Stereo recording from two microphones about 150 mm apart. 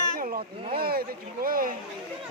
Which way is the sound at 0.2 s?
70° right (ahead or behind).